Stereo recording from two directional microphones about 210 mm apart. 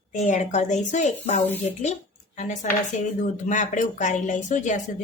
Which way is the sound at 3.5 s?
35° left (ahead or behind).